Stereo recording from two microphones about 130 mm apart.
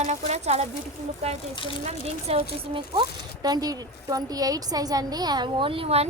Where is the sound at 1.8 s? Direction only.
55° right (ahead or behind).